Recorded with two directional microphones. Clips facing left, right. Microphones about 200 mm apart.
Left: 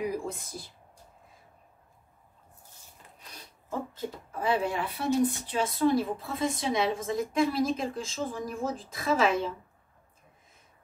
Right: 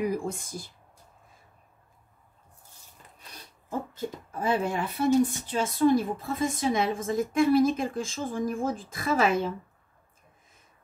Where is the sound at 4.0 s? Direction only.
45° right (ahead or behind).